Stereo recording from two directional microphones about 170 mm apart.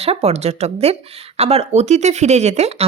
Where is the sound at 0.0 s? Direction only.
35° right (ahead or behind).